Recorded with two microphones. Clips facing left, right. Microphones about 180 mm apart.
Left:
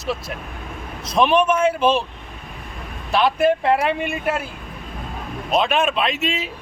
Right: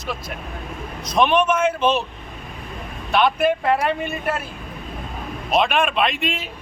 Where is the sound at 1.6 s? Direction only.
30° left (ahead or behind).